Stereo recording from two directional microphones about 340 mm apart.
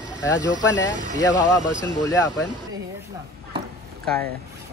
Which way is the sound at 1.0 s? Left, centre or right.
Right.